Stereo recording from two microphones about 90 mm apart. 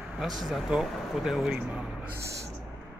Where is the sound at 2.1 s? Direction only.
35° right (ahead or behind).